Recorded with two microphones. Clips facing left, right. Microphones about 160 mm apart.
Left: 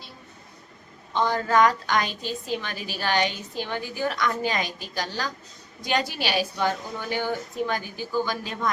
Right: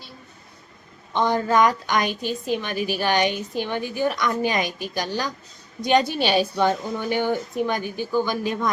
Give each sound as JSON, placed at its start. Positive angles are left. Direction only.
{"t": 1.1, "sound": "a woman's voice", "side_deg": -20}